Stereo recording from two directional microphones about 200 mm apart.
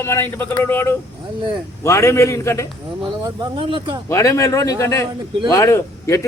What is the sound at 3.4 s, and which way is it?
Speech, 25° right (ahead or behind).